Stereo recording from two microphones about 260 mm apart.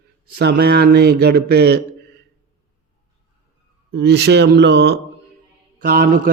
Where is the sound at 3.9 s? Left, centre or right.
Right.